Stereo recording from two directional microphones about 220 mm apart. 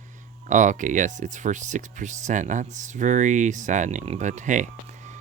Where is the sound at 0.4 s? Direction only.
35° right (ahead or behind).